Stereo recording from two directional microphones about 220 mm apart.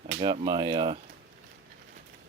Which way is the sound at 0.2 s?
20° right (ahead or behind).